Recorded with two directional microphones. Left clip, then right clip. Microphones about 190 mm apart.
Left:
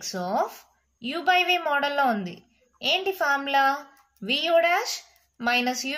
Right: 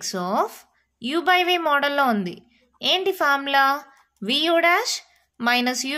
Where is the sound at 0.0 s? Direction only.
45° right (ahead or behind).